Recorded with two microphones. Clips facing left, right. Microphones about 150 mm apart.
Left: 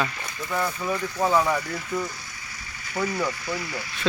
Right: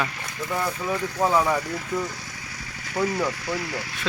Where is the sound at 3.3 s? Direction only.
90° right.